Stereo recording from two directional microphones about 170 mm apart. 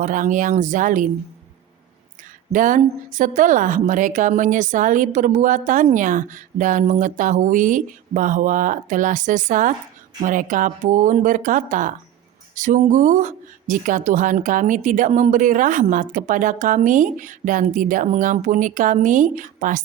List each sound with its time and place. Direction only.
0.0 s a woman's voice: 50° right (ahead or behind)
2.5 s a woman's voice: 50° right (ahead or behind)